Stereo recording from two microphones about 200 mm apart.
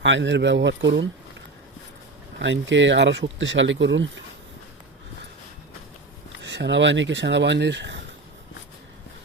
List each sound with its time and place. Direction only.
0.0 s speech: 65° right (ahead or behind)
2.4 s speech: 65° right (ahead or behind)
6.4 s speech: 60° right (ahead or behind)